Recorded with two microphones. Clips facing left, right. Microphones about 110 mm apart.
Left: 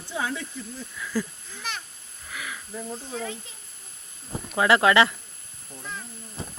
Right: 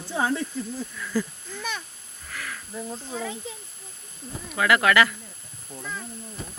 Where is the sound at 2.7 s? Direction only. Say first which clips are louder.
Right 1 dB; 5° right (ahead or behind).